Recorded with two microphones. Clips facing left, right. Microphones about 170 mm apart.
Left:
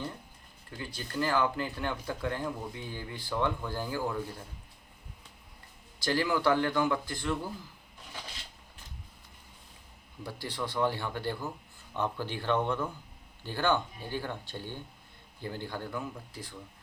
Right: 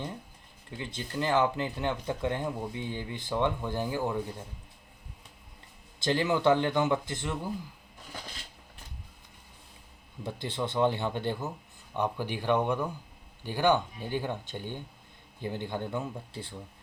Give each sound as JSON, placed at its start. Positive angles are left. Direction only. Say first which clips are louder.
{"t": 0.8, "sound": "speech", "louder": "even", "side_deg": -20}
{"t": 6.0, "sound": "speech", "louder": "right 2 dB", "side_deg": -20}
{"t": 10.2, "sound": "speech", "louder": "right 3 dB", "side_deg": -20}